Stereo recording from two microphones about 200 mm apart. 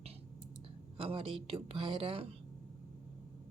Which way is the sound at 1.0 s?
30° right (ahead or behind).